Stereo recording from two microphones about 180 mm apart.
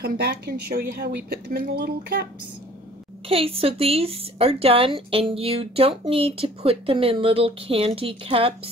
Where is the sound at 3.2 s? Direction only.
30° right (ahead or behind).